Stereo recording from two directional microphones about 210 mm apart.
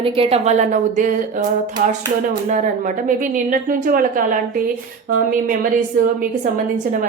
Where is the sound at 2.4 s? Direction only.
35° right (ahead or behind).